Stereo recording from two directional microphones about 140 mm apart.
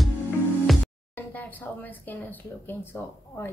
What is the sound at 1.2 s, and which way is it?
A woman's voice, 15° left (ahead or behind).